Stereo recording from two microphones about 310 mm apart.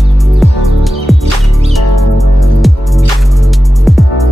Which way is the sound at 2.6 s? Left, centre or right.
Centre.